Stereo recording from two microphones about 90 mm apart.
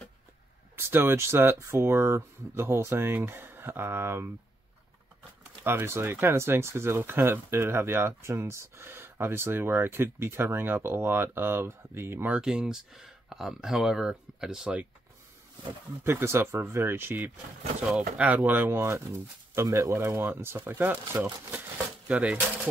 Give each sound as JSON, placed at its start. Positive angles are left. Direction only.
{"t": 0.7, "sound": "speech", "side_deg": -25}
{"t": 5.7, "sound": "speech", "side_deg": -25}
{"t": 12.4, "sound": "speech", "side_deg": -10}
{"t": 16.0, "sound": "speech", "side_deg": -25}